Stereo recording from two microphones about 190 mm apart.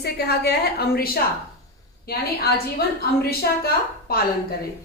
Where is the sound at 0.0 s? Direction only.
55° left (ahead or behind).